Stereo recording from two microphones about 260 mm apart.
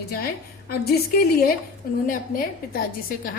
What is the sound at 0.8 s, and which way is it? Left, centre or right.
A woman's voice, left.